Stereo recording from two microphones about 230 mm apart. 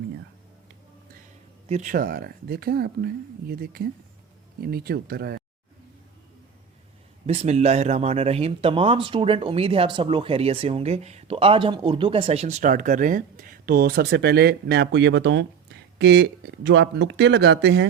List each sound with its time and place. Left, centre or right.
1.6 s speech: right
7.3 s speech: right